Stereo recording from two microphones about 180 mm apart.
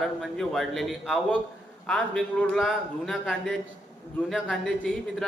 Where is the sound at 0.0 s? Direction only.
Centre (ahead or behind).